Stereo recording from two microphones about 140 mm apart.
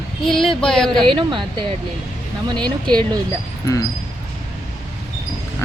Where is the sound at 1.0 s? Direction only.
35° right (ahead or behind).